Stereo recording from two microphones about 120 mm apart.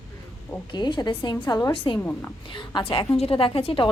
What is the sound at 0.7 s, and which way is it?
A woman's voice, 40° left (ahead or behind).